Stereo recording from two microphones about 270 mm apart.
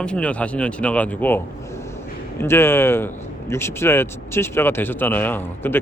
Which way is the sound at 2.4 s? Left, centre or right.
Centre.